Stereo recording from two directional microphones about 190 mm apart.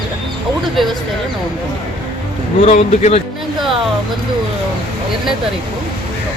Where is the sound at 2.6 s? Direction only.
35° left (ahead or behind).